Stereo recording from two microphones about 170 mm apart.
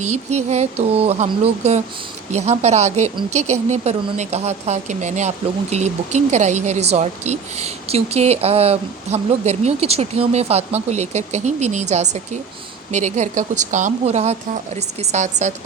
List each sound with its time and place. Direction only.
0.0 s speech: 40° right (ahead or behind)